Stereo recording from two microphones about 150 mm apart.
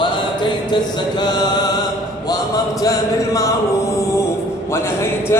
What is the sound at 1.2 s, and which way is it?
Mantra, 25° left (ahead or behind).